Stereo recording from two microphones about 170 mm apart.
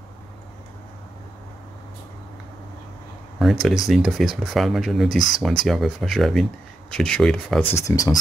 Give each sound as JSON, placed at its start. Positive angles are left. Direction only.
{"t": 3.6, "sound": "speech", "side_deg": 0}
{"t": 7.8, "sound": "speech", "side_deg": 20}